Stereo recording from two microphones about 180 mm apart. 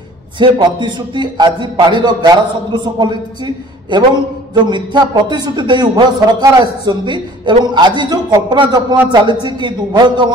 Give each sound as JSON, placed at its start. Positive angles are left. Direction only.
{"t": 0.4, "sound": "a man's voice", "side_deg": -25}